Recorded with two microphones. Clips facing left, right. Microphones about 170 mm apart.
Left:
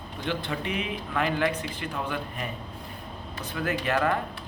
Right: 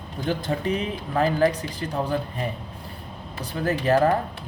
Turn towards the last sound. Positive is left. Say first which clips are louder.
# right 6 dB
turn(degrees=-35)  # may be behind; listen again after turning